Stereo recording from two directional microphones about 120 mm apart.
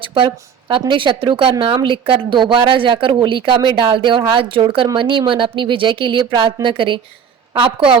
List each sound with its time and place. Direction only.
0.0 s speech: 45° right (ahead or behind)